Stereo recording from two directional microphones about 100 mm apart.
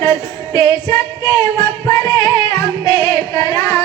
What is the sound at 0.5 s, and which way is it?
Female singing, 40° left (ahead or behind).